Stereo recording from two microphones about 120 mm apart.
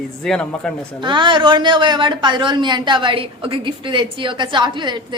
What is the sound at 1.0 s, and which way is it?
A woman's voice, 40° right (ahead or behind).